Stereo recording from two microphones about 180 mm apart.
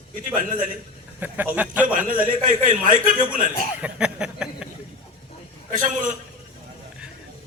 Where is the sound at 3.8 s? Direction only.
5° right (ahead or behind).